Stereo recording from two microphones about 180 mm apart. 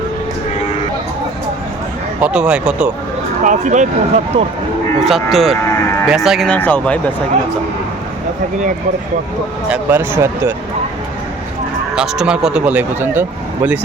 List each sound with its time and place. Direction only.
2.2 s speech: 5° right (ahead or behind)
3.4 s speech: 45° right (ahead or behind)
5.0 s speech: centre (ahead or behind)
9.6 s speech: 10° right (ahead or behind)
11.9 s speech: 5° right (ahead or behind)